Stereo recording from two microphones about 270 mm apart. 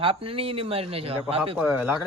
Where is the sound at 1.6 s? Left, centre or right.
Centre.